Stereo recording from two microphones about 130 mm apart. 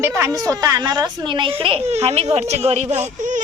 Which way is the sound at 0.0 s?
20° right (ahead or behind).